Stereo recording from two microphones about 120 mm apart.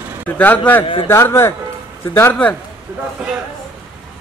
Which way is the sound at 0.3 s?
15° left (ahead or behind).